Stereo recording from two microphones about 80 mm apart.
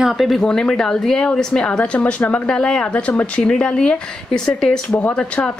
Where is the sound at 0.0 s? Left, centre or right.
Centre.